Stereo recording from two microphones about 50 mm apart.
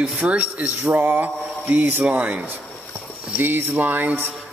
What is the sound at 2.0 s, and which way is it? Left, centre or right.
Speech, right.